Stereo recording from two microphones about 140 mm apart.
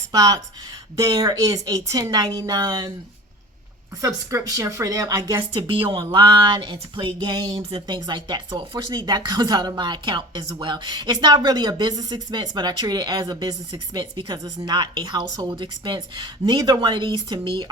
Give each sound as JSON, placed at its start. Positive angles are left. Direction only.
{"t": 0.1, "sound": "a woman's voice", "side_deg": -25}
{"t": 4.0, "sound": "a woman's voice", "side_deg": -25}